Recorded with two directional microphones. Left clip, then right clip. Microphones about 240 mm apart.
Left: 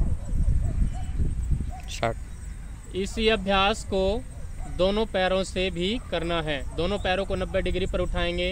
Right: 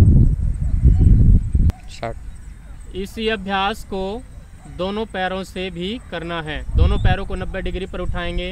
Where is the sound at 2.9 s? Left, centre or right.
Right.